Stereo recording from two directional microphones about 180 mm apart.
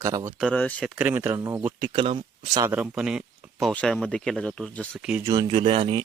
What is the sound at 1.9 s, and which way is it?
Speech, 30° right (ahead or behind).